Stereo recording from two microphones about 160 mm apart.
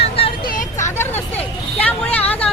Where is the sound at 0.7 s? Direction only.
20° left (ahead or behind).